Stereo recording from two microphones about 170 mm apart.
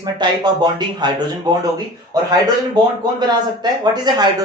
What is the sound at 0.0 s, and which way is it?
Speech, 25° right (ahead or behind).